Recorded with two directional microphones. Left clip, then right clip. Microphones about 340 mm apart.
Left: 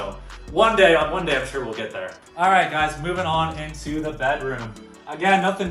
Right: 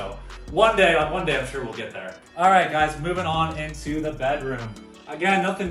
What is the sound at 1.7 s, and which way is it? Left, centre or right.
Speech, centre.